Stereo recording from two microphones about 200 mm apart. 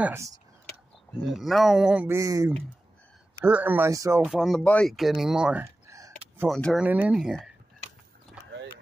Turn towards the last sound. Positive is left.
turn(degrees=0)  # may be behind; listen again after turning